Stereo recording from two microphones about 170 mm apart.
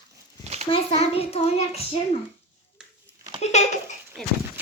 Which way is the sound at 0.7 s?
35° left (ahead or behind).